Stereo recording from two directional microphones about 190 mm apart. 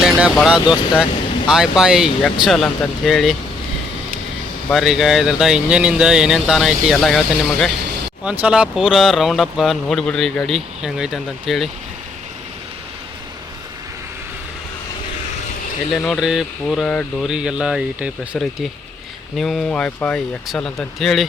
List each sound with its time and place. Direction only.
0.0 s vehicle: 5° right (ahead or behind)
0.3 s speech: 5° right (ahead or behind)
4.7 s speech: centre (ahead or behind)
8.2 s speech: 5° right (ahead or behind)
15.9 s speech: 5° left (ahead or behind)